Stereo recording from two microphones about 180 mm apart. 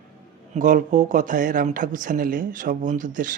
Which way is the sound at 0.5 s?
45° right (ahead or behind).